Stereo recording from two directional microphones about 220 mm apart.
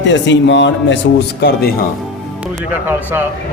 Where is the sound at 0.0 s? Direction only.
55° left (ahead or behind).